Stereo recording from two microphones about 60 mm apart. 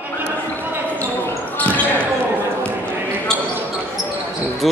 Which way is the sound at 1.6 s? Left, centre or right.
Left.